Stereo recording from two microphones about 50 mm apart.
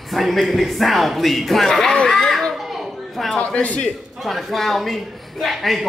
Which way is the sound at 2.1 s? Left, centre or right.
Centre.